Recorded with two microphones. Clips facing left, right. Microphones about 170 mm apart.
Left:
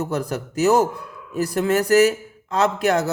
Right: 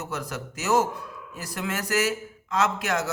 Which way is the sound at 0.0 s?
35° left (ahead or behind).